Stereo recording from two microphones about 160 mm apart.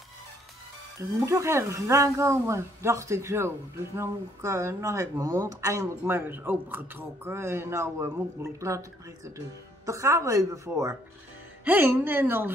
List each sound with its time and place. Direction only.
1.2 s a woman's voice: 15° right (ahead or behind)